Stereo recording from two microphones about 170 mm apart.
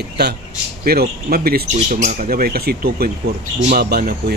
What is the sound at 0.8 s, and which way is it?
Speech, 65° right (ahead or behind).